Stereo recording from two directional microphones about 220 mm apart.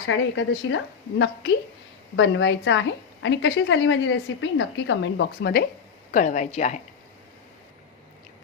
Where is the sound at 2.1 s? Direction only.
55° left (ahead or behind).